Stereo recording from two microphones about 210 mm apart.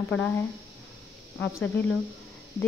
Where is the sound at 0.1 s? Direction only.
10° left (ahead or behind).